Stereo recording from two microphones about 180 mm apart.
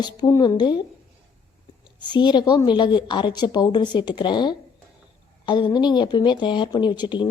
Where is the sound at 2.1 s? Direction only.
25° left (ahead or behind).